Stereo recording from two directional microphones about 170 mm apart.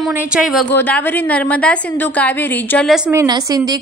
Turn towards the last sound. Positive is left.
turn(degrees=-20)  # may be behind; listen again after turning